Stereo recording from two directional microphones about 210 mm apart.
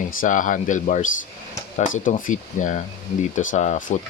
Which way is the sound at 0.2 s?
40° left (ahead or behind).